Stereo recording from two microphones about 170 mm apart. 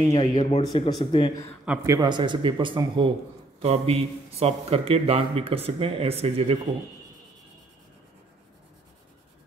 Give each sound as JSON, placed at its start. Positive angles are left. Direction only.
{"t": 0.1, "sound": "speech", "side_deg": 20}
{"t": 1.9, "sound": "a man's voice", "side_deg": -25}